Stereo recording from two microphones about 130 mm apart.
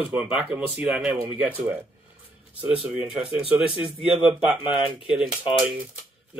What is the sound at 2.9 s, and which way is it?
Speech, 5° right (ahead or behind).